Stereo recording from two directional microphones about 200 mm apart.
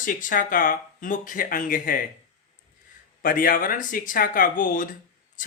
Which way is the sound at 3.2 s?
45° left (ahead or behind).